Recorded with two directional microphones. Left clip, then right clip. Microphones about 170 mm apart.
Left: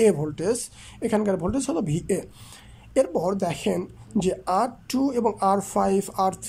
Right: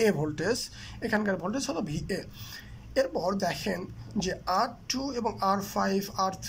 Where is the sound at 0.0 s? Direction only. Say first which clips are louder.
Left 6 dB; 10° left (ahead or behind).